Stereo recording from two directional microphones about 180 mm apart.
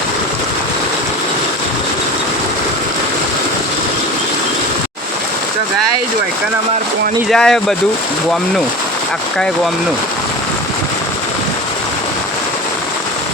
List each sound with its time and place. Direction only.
7.3 s speech: 5° left (ahead or behind)